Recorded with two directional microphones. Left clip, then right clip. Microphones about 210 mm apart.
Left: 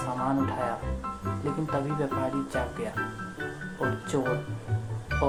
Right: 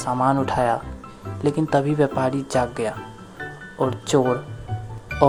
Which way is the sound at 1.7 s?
45° right (ahead or behind).